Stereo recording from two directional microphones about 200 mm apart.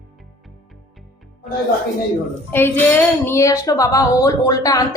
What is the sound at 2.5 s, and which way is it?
Speech, 10° left (ahead or behind).